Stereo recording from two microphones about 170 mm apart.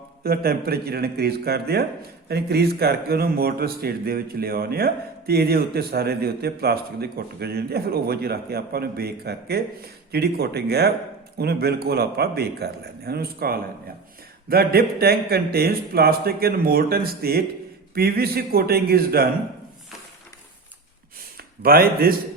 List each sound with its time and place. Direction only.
0.2 s a man's voice: 65° right (ahead or behind)
21.3 s speech: 60° right (ahead or behind)